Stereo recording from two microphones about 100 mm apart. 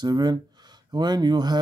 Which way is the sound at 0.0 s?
45° right (ahead or behind).